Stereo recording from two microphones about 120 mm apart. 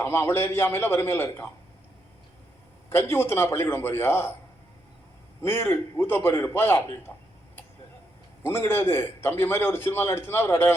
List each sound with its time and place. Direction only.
0.0 s a man's voice: 20° left (ahead or behind)
2.9 s a man's voice: 20° left (ahead or behind)
5.4 s a man's voice: 20° left (ahead or behind)
8.4 s a man's voice: 20° left (ahead or behind)